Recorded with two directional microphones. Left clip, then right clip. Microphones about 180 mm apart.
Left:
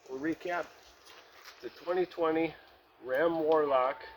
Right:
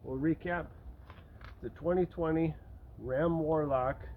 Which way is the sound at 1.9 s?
5° left (ahead or behind).